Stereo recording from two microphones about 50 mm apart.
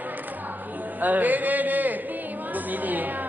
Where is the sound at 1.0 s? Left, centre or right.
Right.